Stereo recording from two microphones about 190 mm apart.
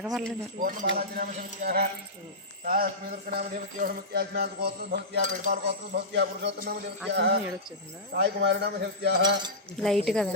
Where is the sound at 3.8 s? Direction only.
55° right (ahead or behind).